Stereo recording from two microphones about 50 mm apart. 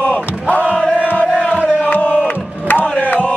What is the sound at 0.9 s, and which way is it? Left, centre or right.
Crowd, left.